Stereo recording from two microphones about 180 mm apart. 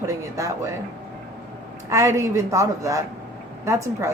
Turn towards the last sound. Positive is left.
turn(degrees=-15)  # may be behind; listen again after turning